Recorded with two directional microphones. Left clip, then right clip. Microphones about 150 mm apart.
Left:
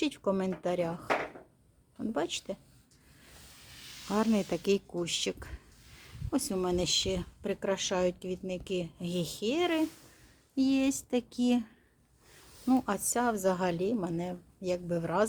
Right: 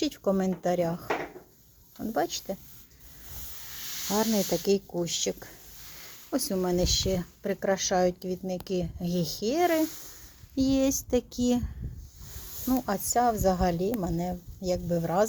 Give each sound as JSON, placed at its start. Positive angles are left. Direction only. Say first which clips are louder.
{"t": 0.0, "sound": "speech", "louder": "right 3 dB", "side_deg": -10}
{"t": 2.0, "sound": "speech", "louder": "right 4 dB", "side_deg": -5}
{"t": 4.1, "sound": "speech", "louder": "right 3 dB", "side_deg": -10}
{"t": 12.6, "sound": "speech", "louder": "right 1 dB", "side_deg": 0}